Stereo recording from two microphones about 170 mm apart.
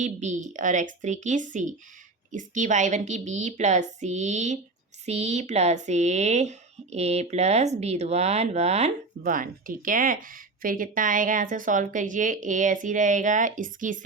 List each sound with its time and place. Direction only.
0.0 s speech: 45° right (ahead or behind)